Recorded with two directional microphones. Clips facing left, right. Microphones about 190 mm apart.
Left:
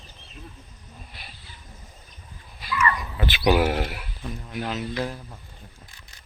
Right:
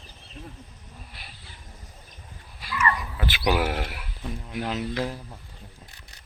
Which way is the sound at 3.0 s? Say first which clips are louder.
Left 3 dB; 10° right (ahead or behind).